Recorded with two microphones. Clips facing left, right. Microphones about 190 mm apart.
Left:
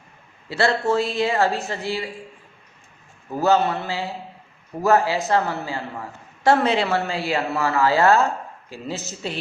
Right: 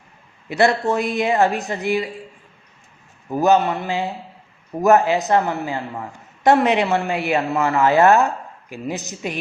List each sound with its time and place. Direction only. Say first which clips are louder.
0.4 s speech: right 3 dB; 20° right (ahead or behind)
3.3 s speech: right 3 dB; 15° right (ahead or behind)